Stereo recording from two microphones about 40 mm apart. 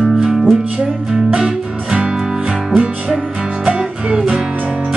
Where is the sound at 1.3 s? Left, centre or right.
Centre.